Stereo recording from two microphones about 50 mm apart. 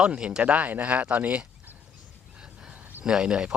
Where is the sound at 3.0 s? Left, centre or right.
Centre.